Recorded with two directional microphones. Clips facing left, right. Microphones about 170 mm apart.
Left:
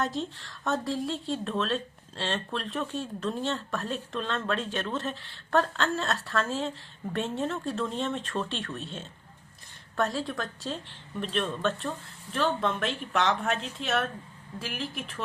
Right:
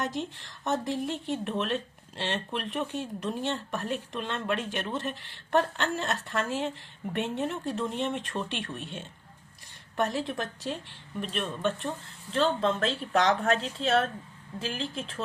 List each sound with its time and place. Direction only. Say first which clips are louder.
0.0 s speech: left 1 dB; 15° right (ahead or behind)